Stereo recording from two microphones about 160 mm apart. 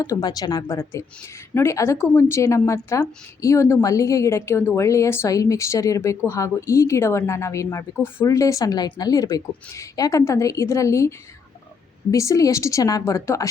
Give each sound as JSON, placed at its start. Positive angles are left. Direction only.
{"t": 0.0, "sound": "a woman's voice", "side_deg": 25}
{"t": 12.1, "sound": "a woman's voice", "side_deg": 20}